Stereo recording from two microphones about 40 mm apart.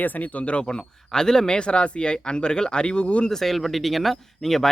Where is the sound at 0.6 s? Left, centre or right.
Centre.